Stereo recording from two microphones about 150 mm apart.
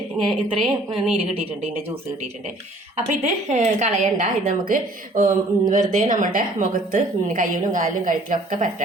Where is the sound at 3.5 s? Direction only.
50° right (ahead or behind).